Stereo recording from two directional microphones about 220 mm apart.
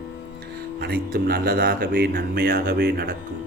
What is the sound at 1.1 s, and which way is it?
Speech, 45° right (ahead or behind).